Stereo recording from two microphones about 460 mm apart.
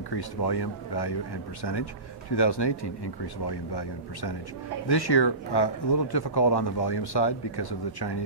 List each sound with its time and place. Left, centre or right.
0.1 s speech: left